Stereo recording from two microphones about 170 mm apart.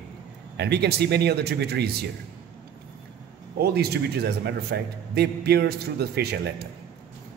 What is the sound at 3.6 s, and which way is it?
A man's voice, 70° right (ahead or behind).